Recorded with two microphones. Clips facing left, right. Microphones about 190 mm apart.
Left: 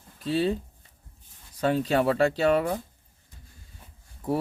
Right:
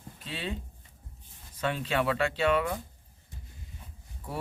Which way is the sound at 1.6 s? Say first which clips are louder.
Left 6 dB; 40° left (ahead or behind).